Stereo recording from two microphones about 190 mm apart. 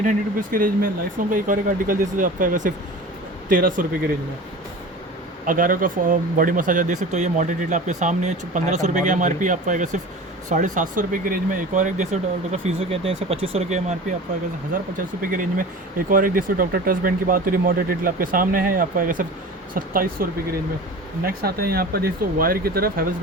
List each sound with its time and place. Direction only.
0.0 s speech: 45° right (ahead or behind)
5.5 s speech: 45° right (ahead or behind)
21.2 s speech: 55° right (ahead or behind)